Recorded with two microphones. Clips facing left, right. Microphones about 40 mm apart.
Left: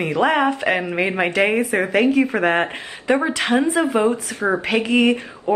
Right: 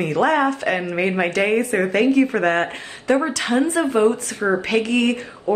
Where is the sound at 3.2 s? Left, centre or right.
Left.